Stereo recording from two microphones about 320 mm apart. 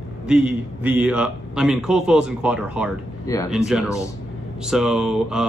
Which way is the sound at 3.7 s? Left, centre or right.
Centre.